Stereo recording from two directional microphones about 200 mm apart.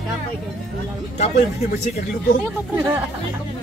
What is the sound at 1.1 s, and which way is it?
Speech, 35° left (ahead or behind).